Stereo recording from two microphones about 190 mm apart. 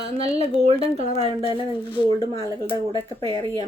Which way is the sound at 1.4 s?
25° left (ahead or behind).